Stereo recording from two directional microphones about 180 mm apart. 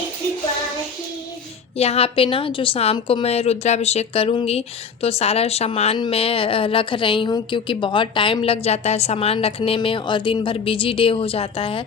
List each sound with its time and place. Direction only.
1.7 s a woman's voice: 35° left (ahead or behind)